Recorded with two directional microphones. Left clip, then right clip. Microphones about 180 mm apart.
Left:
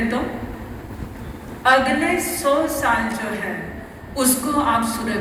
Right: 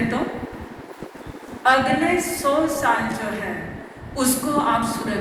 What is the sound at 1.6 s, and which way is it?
A woman's voice, 50° right (ahead or behind).